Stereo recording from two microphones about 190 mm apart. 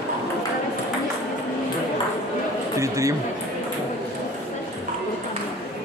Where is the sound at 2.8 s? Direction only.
15° right (ahead or behind).